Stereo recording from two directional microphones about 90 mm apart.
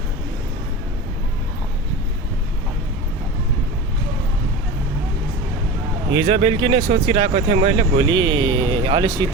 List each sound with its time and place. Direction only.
6.1 s speech: 75° right (ahead or behind); by 9.2 s 55° right (ahead or behind)